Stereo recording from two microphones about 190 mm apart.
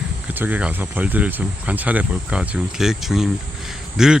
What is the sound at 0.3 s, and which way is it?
Speech, 10° right (ahead or behind).